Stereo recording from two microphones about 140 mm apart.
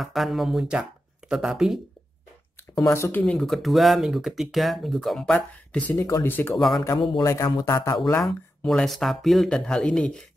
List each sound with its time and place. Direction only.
0.0 s speech: centre (ahead or behind)
2.9 s speech: 15° left (ahead or behind)
6.5 s speech: centre (ahead or behind)
7.0 s speech: 35° left (ahead or behind)
7.2 s speech: 25° left (ahead or behind)
8.2 s speech: centre (ahead or behind)